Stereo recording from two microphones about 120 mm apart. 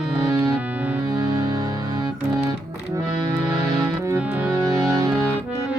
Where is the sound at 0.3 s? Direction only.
35° right (ahead or behind).